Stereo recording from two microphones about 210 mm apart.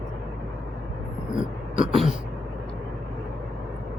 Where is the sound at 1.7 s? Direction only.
25° right (ahead or behind).